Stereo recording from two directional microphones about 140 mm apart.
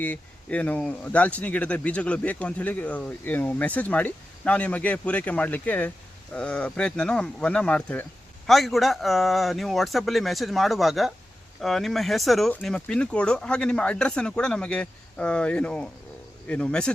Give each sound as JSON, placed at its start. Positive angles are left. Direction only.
{"t": 0.0, "sound": "speech", "side_deg": 10}